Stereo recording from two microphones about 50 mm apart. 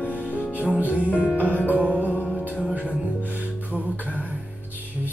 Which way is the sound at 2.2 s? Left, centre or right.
Left.